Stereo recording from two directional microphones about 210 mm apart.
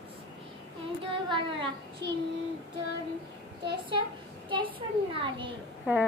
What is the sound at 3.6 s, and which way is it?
A child's voice, 20° right (ahead or behind).